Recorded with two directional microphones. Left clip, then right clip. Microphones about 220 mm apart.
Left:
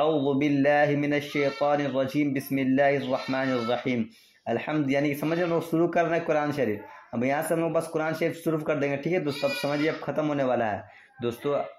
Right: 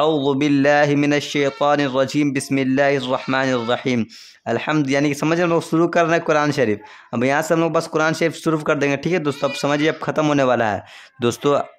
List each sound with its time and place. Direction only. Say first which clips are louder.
0.0 s speech: right 6 dB; 35° right (ahead or behind)